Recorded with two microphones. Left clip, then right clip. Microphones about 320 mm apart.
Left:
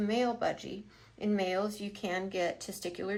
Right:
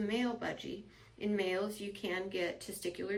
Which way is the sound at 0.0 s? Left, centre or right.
Left.